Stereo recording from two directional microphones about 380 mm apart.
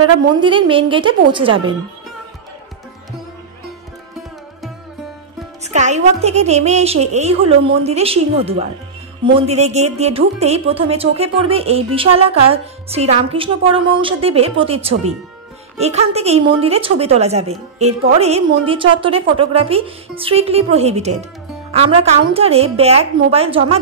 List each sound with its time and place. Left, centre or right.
0.4 s a woman's voice: centre
5.6 s a woman's voice: centre